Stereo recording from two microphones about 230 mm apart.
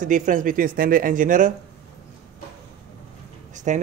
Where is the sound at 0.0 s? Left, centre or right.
Right.